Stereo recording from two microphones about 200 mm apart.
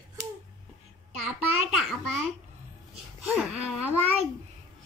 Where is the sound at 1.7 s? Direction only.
Centre (ahead or behind).